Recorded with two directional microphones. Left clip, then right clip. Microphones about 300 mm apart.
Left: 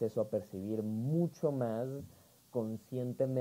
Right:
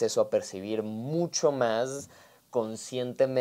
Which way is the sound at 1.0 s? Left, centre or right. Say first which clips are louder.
Right 6 dB; right.